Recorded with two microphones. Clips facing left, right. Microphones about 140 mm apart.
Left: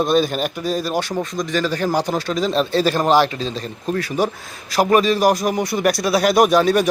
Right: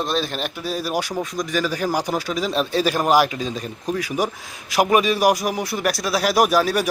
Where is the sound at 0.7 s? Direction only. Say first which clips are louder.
Even; 10° right (ahead or behind).